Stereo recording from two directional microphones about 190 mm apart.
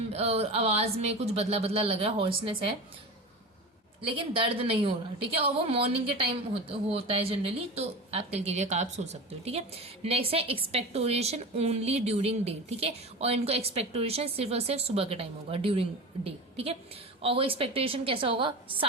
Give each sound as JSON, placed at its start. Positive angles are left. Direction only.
{"t": 0.1, "sound": "a woman's voice", "side_deg": -35}
{"t": 4.1, "sound": "a woman's voice", "side_deg": -30}